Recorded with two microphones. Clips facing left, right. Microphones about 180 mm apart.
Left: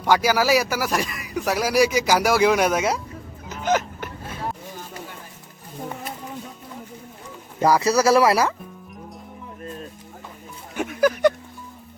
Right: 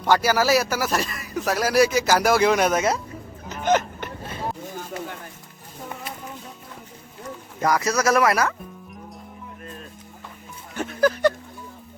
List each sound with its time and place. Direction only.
0.0 s speech: 10° left (ahead or behind)
3.5 s a sound: 5° left (ahead or behind)
7.6 s speech: 30° left (ahead or behind)
10.8 s speech: 15° left (ahead or behind)